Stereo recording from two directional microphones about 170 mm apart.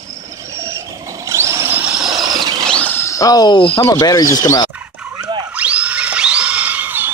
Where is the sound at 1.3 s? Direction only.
15° right (ahead or behind).